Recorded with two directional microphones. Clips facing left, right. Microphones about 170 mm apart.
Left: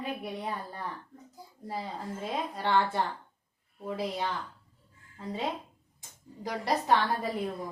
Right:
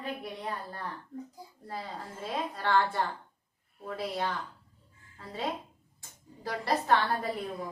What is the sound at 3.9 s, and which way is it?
Speech, 20° left (ahead or behind).